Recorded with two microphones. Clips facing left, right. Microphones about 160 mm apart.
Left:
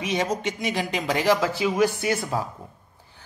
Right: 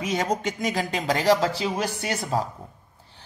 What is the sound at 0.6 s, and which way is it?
Speech, 45° right (ahead or behind).